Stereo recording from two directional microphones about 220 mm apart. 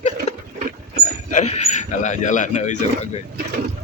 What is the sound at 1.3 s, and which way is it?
Speech, 35° left (ahead or behind).